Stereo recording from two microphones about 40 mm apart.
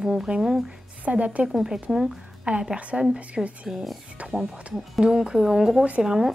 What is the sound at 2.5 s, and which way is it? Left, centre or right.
Speech, right.